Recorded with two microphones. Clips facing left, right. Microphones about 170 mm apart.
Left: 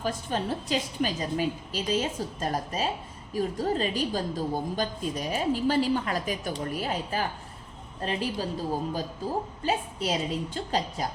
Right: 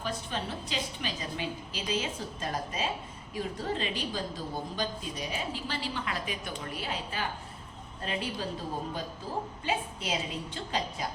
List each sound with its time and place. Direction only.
0.0 s a woman's voice: 45° left (ahead or behind)
9.6 s a woman's voice: 40° left (ahead or behind)